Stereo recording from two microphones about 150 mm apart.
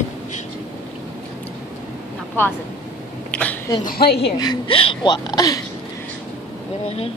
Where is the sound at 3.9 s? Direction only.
90° left.